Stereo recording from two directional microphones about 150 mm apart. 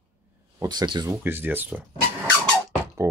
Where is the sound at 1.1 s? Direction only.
15° right (ahead or behind).